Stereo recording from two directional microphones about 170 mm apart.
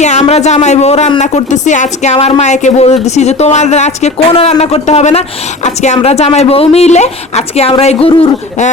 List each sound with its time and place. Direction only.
0.0 s speech: 45° left (ahead or behind)